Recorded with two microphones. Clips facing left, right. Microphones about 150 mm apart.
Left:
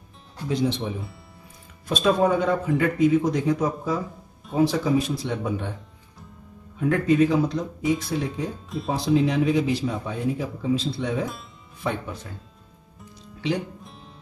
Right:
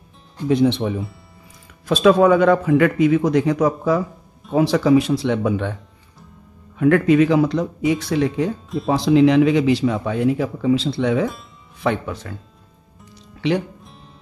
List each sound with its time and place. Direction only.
0.5 s speech: 65° right (ahead or behind)
1.9 s a man's voice: 90° right
6.8 s a man's voice: 75° right (ahead or behind)
13.1 s music: 70° right (ahead or behind)